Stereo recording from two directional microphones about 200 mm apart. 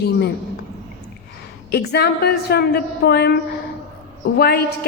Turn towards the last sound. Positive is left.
turn(degrees=50)  # may be behind; listen again after turning